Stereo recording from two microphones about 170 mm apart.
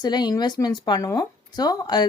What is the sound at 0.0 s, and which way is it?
Speech, 25° left (ahead or behind).